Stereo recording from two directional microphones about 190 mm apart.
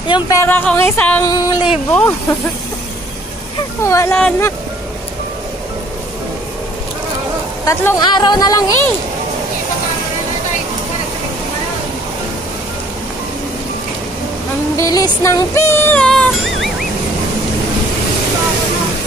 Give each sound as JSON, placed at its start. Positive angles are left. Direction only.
{"t": 0.1, "sound": "music", "side_deg": 15}
{"t": 1.2, "sound": "speech", "side_deg": 20}
{"t": 3.8, "sound": "music", "side_deg": 15}
{"t": 7.6, "sound": "speech", "side_deg": 20}
{"t": 14.8, "sound": "music", "side_deg": 15}